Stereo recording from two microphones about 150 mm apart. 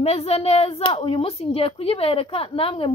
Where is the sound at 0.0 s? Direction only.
45° left (ahead or behind).